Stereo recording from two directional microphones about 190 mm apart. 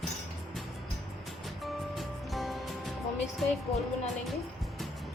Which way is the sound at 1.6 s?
Centre (ahead or behind).